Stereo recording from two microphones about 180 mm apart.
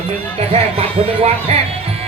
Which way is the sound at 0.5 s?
35° right (ahead or behind).